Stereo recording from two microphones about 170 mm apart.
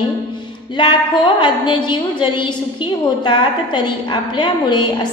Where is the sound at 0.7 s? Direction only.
25° left (ahead or behind).